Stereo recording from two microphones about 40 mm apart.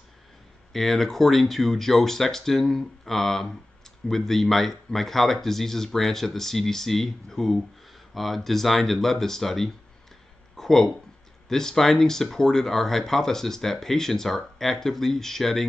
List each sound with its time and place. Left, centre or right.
0.7 s speech: centre
8.1 s speech: centre
10.5 s a sound: centre
11.4 s speech: centre